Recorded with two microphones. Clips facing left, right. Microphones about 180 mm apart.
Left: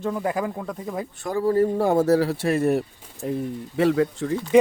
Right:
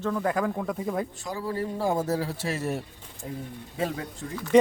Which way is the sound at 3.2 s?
80° left.